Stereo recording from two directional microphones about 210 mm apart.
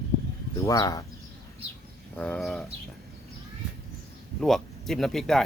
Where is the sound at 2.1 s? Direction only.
5° left (ahead or behind).